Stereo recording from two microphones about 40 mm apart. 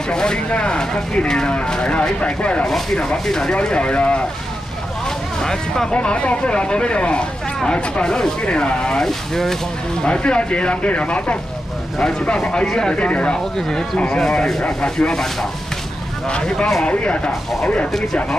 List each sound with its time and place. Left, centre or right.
0.1 s speech: centre
3.3 s speech: centre
3.5 s speech: left
5.4 s speech: centre
6.0 s speech: left
9.0 s speech: centre
10.0 s speech: left
12.0 s speech: centre
13.4 s speech: centre
16.3 s speech: left